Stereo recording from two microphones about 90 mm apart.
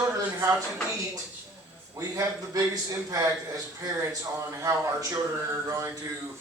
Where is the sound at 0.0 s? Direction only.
35° right (ahead or behind).